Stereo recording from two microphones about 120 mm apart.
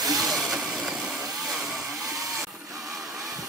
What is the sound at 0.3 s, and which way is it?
Vehicle, centre (ahead or behind).